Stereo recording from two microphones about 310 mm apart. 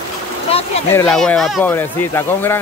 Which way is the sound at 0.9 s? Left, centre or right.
Centre.